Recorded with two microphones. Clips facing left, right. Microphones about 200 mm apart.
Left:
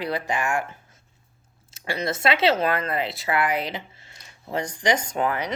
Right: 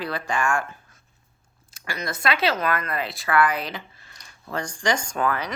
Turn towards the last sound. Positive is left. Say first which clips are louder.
# even
turn(degrees=20)  # may be behind; listen again after turning